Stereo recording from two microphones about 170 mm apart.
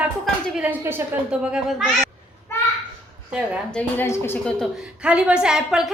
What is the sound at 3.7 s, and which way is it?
Speech, 10° left (ahead or behind).